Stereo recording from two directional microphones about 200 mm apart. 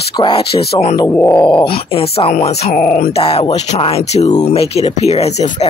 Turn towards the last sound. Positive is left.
turn(degrees=35)  # may be behind; listen again after turning